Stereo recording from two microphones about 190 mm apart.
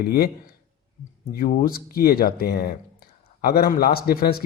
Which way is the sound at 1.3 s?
50° left (ahead or behind).